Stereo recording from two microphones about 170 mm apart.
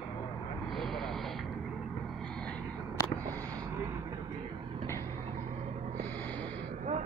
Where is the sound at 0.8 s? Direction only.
Centre (ahead or behind).